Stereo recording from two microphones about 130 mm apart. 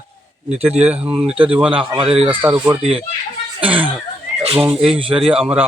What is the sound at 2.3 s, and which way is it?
Speech, 15° right (ahead or behind).